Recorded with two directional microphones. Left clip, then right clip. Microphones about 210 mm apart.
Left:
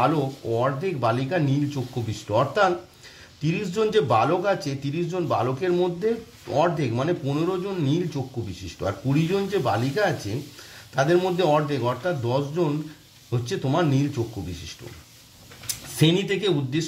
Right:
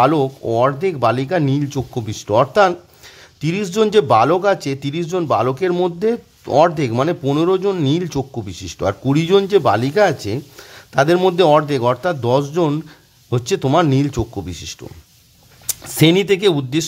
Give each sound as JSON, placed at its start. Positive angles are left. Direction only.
{"t": 0.0, "sound": "a man's voice", "side_deg": -40}
{"t": 16.0, "sound": "a man's voice", "side_deg": -40}